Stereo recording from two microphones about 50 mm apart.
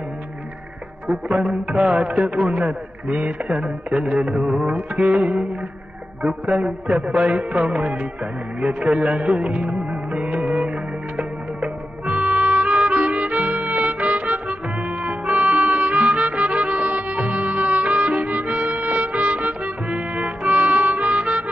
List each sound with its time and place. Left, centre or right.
1.3 s music: centre
2.0 s music: right
5.0 s music: centre
6.9 s music: right
9.8 s music: right